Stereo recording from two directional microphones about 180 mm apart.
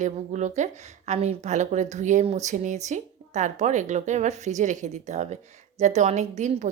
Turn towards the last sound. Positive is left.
turn(degrees=-40)  # may be behind; listen again after turning